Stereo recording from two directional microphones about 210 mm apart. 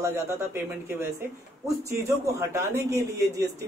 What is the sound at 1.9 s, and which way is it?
A man's voice, 10° right (ahead or behind).